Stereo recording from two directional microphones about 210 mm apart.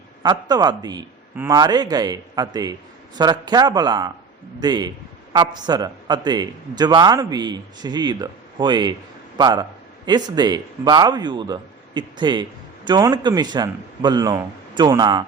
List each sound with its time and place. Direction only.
0.2 s a man's voice: 20° right (ahead or behind)